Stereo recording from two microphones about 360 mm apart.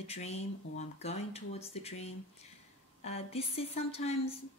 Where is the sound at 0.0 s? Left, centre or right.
Centre.